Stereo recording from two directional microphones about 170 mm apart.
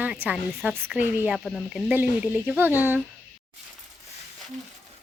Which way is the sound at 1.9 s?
10° right (ahead or behind).